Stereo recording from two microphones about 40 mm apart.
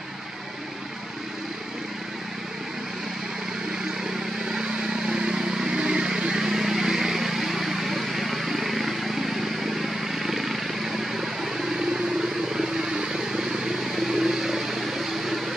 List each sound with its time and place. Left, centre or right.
4.5 s vehicle: centre